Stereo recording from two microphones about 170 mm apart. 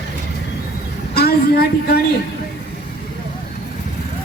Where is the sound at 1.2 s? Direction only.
65° left (ahead or behind).